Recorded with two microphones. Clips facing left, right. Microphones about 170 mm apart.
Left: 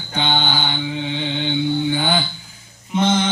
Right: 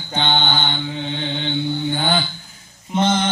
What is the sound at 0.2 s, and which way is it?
Mantra, 5° left (ahead or behind).